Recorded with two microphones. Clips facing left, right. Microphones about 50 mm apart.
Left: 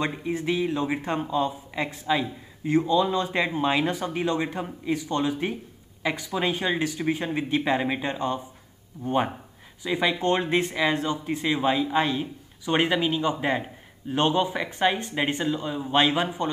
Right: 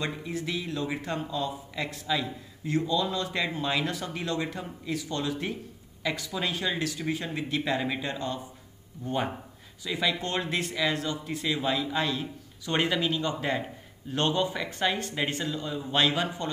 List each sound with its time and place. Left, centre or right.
0.0 s speech: left